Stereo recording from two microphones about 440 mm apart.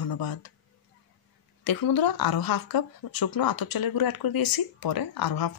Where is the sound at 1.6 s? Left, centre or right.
Left.